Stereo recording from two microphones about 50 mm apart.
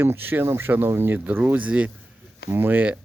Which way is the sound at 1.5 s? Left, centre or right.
Right.